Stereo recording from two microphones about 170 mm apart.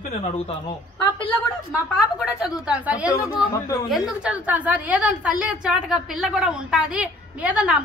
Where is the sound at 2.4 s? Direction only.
5° right (ahead or behind).